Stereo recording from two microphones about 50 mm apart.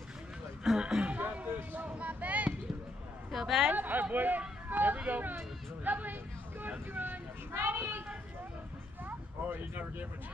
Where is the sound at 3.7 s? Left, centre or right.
Right.